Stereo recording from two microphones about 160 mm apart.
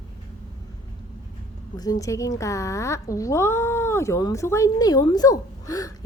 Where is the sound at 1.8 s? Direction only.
20° left (ahead or behind).